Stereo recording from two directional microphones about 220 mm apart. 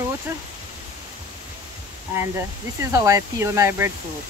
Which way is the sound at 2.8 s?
15° right (ahead or behind).